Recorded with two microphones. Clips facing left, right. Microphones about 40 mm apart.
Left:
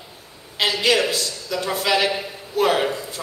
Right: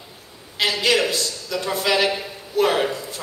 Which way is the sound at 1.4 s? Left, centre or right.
Centre.